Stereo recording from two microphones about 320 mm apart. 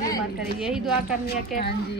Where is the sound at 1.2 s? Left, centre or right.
Left.